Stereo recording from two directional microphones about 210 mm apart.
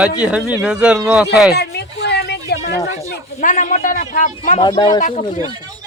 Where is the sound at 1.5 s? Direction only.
50° left (ahead or behind).